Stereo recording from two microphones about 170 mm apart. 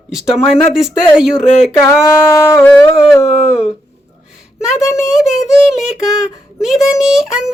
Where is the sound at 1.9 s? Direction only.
15° left (ahead or behind).